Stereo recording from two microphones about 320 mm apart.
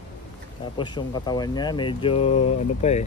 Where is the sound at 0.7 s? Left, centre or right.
Centre.